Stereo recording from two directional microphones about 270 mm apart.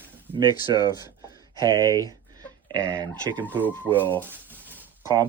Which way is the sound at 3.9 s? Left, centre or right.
Centre.